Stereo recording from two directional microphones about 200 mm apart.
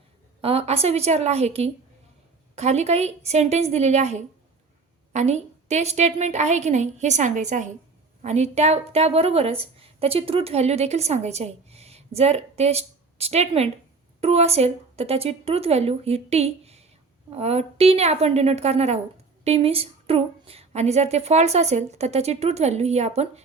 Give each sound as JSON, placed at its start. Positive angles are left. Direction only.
{"t": 0.4, "sound": "a woman's voice", "side_deg": -30}